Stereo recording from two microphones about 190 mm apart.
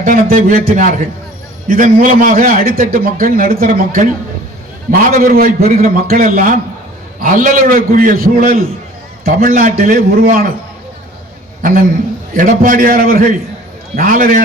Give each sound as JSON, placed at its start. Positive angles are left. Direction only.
{"t": 0.0, "sound": "a man's voice", "side_deg": -45}
{"t": 11.6, "sound": "a man's voice", "side_deg": -45}